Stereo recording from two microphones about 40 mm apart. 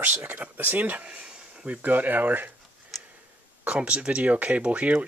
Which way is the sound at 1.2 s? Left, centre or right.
Right.